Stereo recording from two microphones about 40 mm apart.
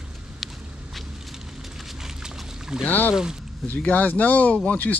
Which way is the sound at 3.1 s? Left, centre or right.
Centre.